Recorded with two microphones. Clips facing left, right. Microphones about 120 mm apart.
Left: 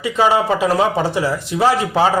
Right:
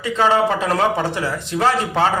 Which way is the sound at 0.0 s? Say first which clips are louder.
Left 1 dB; 10° left (ahead or behind).